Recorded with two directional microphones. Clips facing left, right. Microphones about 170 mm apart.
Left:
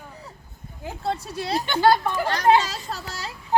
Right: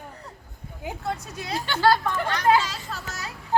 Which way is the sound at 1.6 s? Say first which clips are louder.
Left 1 dB; 20° left (ahead or behind).